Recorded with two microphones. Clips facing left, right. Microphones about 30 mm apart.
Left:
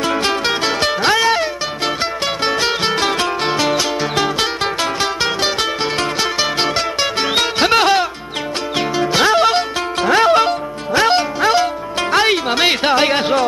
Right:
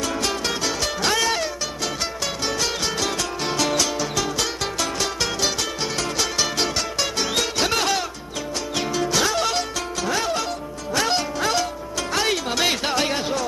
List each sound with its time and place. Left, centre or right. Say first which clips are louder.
0.0 s music: left 7 dB; left
1.1 s music: left 7 dB; left
2.4 s music: left 8 dB; left
10.9 s music: left 8 dB; left